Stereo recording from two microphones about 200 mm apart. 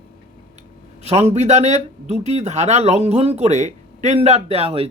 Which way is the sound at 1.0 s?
35° right (ahead or behind).